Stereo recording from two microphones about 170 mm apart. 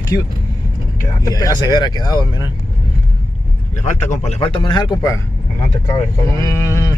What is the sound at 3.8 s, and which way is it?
Speech, 40° left (ahead or behind).